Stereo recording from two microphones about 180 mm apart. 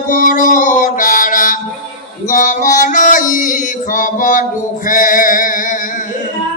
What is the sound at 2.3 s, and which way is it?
Male singing, 45° left (ahead or behind).